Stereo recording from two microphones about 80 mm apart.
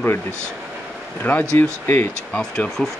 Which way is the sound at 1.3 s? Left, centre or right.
Left.